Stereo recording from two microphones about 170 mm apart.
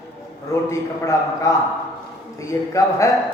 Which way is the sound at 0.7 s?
20° left (ahead or behind).